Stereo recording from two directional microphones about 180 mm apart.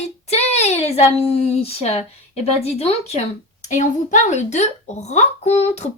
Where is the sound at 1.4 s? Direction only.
35° left (ahead or behind).